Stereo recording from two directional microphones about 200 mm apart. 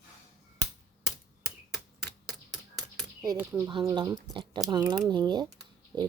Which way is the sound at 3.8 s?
20° right (ahead or behind).